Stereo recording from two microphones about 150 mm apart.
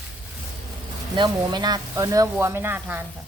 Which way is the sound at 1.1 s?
30° right (ahead or behind).